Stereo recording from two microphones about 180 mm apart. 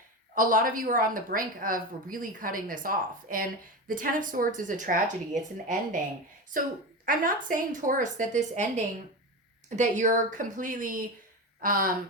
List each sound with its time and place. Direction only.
0.3 s a woman's voice: 50° right (ahead or behind)
7.0 s a woman's voice: 50° right (ahead or behind)